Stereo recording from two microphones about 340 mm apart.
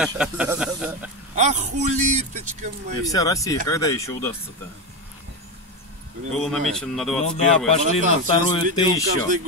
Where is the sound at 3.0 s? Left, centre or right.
Centre.